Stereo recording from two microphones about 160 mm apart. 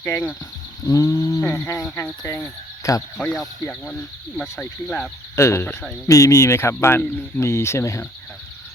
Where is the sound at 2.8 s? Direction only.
20° left (ahead or behind).